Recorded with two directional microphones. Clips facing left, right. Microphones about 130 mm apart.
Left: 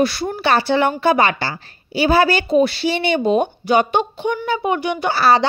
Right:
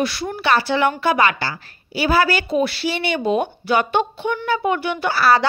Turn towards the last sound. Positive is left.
turn(degrees=25)  # may be behind; listen again after turning